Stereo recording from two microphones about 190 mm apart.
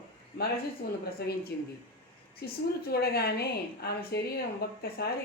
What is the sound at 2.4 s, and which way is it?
Speech, 55° left (ahead or behind).